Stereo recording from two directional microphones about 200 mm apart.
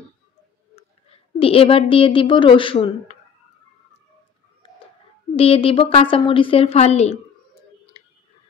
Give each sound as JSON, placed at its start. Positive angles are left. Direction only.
{"t": 0.7, "sound": "a woman's voice", "side_deg": 30}
{"t": 5.3, "sound": "a woman's voice", "side_deg": 30}